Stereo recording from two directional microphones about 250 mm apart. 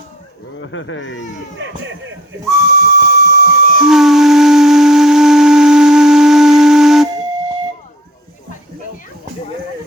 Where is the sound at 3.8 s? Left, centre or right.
Centre.